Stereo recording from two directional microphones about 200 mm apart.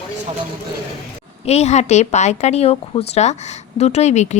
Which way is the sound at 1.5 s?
35° left (ahead or behind).